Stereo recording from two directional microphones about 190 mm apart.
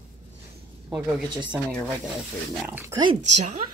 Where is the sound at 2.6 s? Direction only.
15° right (ahead or behind).